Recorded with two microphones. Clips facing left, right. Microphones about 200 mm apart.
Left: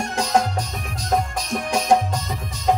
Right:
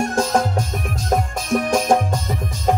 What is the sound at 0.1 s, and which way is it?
Music, 50° right (ahead or behind).